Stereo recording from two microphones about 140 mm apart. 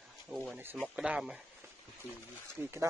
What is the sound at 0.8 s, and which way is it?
Speech, 5° right (ahead or behind).